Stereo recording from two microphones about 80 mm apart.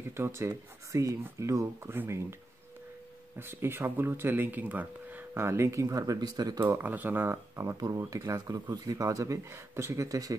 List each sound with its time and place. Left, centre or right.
0.1 s speech: right
3.3 s speech: right
5.3 s speech: right
6.8 s speech: right
7.7 s speech: right
8.0 s speech: right